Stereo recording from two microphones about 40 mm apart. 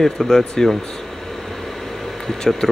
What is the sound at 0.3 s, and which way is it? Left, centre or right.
Speech, centre.